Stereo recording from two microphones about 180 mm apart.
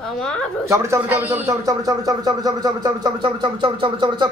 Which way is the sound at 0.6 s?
15° right (ahead or behind).